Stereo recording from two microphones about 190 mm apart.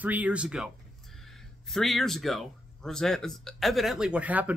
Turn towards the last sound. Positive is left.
turn(degrees=-10)  # may be behind; listen again after turning